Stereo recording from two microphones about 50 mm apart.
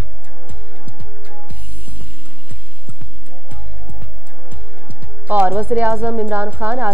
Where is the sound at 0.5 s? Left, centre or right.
Right.